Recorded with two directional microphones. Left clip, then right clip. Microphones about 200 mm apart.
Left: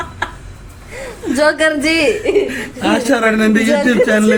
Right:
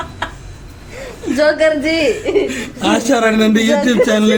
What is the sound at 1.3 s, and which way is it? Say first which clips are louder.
Speech: right 1 dB; 15° left (ahead or behind).